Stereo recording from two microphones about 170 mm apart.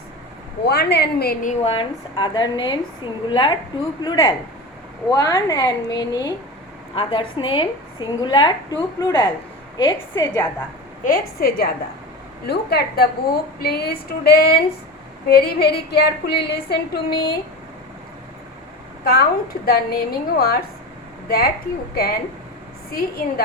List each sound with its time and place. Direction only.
0.6 s a woman's voice: 70° left (ahead or behind)
1.6 s a woman's voice: 30° left (ahead or behind)
11.0 s a woman's voice: 60° left (ahead or behind)
19.0 s a woman's voice: 60° left (ahead or behind)